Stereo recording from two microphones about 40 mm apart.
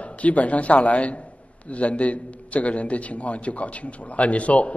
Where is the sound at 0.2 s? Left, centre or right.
Left.